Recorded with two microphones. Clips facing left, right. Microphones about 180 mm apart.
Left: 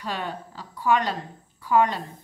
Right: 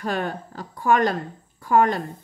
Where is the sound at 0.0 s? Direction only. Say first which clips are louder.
Right 5 dB; 50° right (ahead or behind).